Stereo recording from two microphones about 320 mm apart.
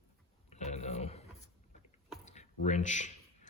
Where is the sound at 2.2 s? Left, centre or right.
Left.